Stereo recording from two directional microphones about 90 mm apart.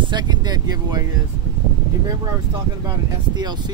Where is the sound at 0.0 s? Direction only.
55° right (ahead or behind).